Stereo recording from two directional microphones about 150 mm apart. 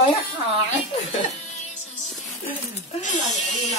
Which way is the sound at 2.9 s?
55° left (ahead or behind).